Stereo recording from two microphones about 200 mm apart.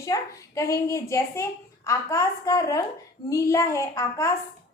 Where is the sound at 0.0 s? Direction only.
15° left (ahead or behind).